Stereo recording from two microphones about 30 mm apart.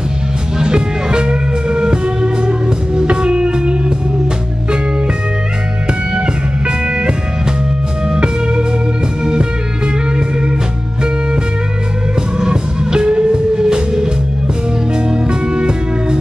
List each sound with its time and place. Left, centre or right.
0.6 s music: right
8.1 s music: right
12.4 s music: right